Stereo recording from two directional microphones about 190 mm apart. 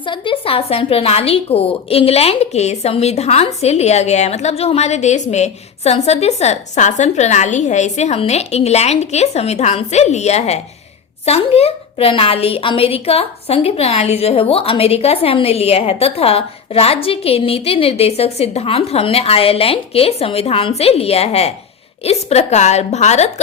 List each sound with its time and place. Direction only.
0.0 s a woman's voice: 25° left (ahead or behind)